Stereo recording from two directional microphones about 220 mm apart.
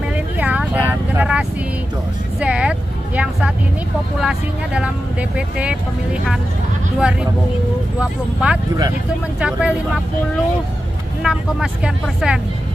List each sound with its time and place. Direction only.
0.4 s vehicle: 5° right (ahead or behind)
2.4 s speech: 5° right (ahead or behind)
8.0 s speech: 5° right (ahead or behind)
11.2 s speech: centre (ahead or behind)